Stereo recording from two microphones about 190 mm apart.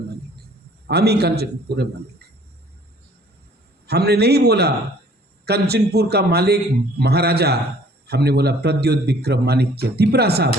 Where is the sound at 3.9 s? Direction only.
60° right (ahead or behind).